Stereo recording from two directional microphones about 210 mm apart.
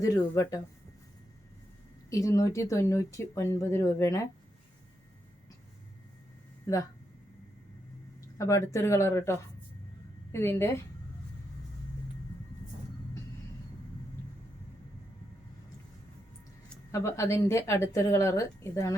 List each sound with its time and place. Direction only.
0.0 s speech: 15° left (ahead or behind)
2.0 s speech: 15° left (ahead or behind)
8.4 s speech: 15° left (ahead or behind)
16.6 s speech: 15° left (ahead or behind)